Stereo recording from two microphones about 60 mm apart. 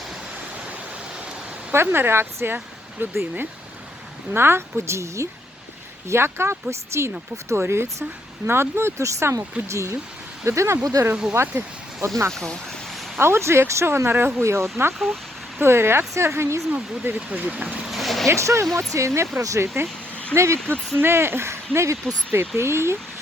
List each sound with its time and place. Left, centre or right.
1.7 s speech: right
6.1 s speech: right
11.0 s speech: right
11.4 s speech: right
12.3 s speech: centre
13.1 s speech: right
14.9 s a sound: centre
15.6 s speech: right
17.0 s speech: right
17.9 s a sound: centre
18.3 s speech: right
19.6 s speech: right
20.3 s speech: right